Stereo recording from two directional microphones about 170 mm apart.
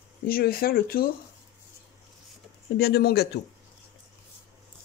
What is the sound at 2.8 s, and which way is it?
Speech, 70° left (ahead or behind).